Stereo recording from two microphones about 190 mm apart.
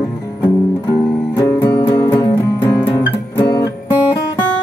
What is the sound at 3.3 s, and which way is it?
Music, 15° left (ahead or behind).